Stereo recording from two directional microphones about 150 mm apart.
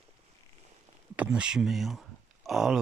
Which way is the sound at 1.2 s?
5° right (ahead or behind).